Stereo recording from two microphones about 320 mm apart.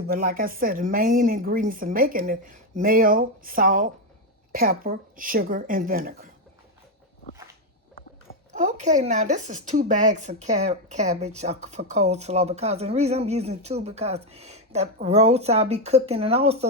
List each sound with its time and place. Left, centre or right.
0.1 s speech: right
8.5 s speech: right